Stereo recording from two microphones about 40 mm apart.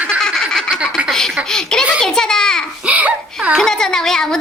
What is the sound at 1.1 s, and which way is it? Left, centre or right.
A child's voice, centre.